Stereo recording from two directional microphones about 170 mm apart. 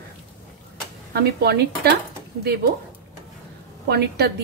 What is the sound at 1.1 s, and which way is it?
Speech, 70° right (ahead or behind).